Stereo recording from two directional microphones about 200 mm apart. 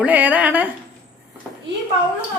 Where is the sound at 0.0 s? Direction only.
10° right (ahead or behind).